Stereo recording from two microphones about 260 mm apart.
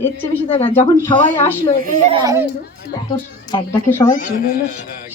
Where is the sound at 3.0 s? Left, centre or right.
Centre.